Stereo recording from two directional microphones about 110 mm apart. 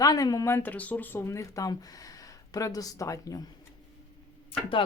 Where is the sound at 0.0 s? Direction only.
35° left (ahead or behind).